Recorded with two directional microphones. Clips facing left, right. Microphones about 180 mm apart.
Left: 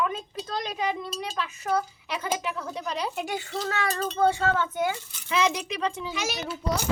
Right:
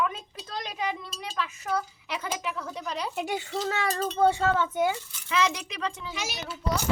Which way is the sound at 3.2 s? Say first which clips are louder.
Right 1 dB; 25° right (ahead or behind).